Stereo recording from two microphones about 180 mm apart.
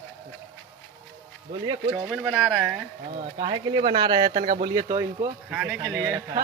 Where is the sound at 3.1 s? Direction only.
35° right (ahead or behind).